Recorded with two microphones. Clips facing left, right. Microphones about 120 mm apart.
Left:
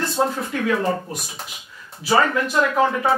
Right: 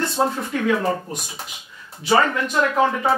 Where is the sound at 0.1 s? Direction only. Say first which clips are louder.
Even; centre (ahead or behind).